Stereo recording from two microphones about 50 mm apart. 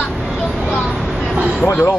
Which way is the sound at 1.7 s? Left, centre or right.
Left.